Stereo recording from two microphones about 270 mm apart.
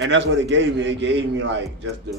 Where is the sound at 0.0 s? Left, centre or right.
Right.